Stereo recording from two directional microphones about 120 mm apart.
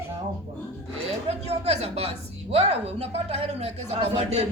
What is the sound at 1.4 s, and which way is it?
A man's voice, 60° right (ahead or behind).